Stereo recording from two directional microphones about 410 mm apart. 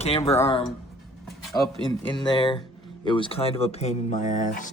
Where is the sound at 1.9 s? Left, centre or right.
Centre.